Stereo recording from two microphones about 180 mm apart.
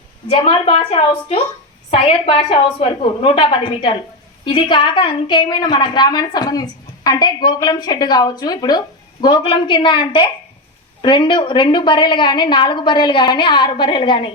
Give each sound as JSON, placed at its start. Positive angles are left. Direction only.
{"t": 0.3, "sound": "a woman's voice", "side_deg": 35}